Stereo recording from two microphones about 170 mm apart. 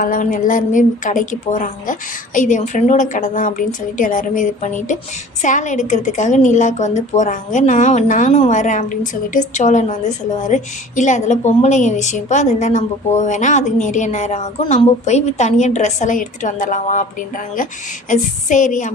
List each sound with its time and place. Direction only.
0.0 s a woman's voice: 50° left (ahead or behind)
18.1 s a woman's voice: 45° left (ahead or behind)